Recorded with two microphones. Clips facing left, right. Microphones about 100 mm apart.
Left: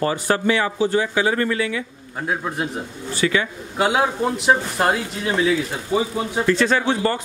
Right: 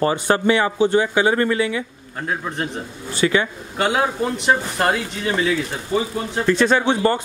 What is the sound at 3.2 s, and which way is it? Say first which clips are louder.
Speech: right 2 dB; 25° right (ahead or behind).